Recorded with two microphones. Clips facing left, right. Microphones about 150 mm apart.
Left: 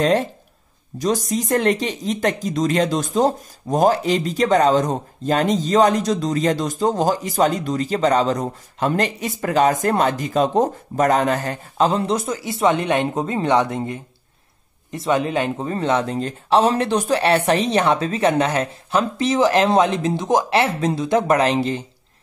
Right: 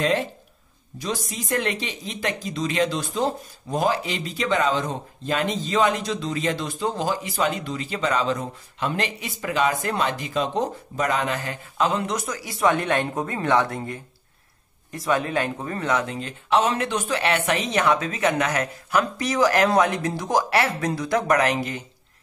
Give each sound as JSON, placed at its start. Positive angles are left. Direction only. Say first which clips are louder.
{"t": 0.0, "sound": "speech", "louder": "left 5 dB", "side_deg": 40}